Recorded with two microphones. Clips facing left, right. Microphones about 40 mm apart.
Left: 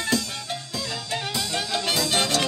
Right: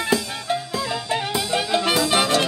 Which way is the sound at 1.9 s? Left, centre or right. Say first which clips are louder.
Right 3 dB; centre.